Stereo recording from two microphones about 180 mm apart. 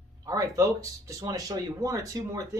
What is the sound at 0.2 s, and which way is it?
Speech, 20° right (ahead or behind).